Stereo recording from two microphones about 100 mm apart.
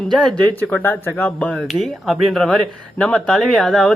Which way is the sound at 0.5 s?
20° left (ahead or behind).